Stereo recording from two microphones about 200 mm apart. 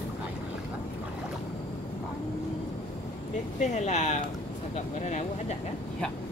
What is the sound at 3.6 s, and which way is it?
Speech, 35° left (ahead or behind).